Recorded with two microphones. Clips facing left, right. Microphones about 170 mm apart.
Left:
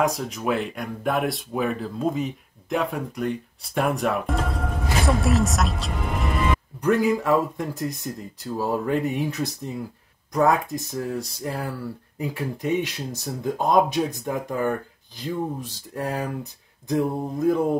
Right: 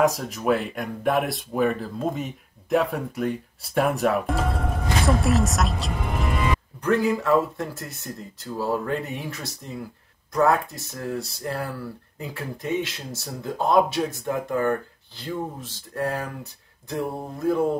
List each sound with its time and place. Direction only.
0.0 s speech: centre (ahead or behind)
6.8 s speech: 10° left (ahead or behind)